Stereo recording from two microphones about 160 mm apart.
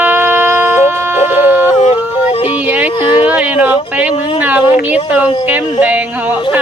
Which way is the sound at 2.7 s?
10° right (ahead or behind).